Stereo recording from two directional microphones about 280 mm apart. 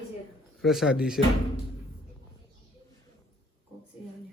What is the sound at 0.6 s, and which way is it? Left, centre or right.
Speech, centre.